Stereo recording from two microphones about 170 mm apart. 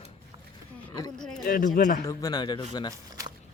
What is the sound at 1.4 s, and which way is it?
Speech, 55° left (ahead or behind).